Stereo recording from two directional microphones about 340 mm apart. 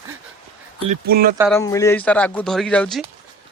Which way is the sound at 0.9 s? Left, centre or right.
Right.